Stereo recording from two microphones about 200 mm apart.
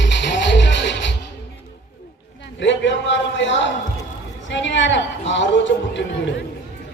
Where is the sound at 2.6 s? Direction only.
65° left (ahead or behind).